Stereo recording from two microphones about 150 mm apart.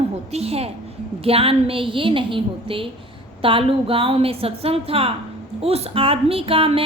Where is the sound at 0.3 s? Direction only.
45° right (ahead or behind).